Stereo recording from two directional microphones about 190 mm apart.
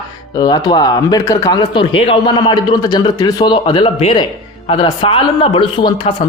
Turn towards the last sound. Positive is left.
turn(degrees=25)  # may be behind; listen again after turning